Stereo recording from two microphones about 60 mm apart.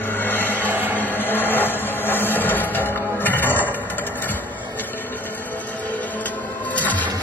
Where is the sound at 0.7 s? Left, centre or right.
Right.